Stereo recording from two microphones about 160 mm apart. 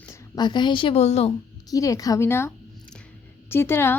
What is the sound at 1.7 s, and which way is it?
Speech, 20° left (ahead or behind).